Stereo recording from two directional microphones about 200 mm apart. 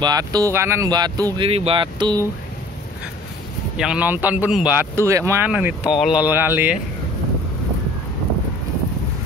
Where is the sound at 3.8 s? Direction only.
5° right (ahead or behind).